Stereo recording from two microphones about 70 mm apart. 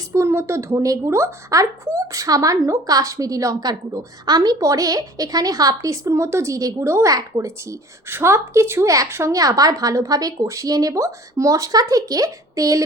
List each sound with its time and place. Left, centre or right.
0.1 s a woman's voice: right
9.3 s speech: right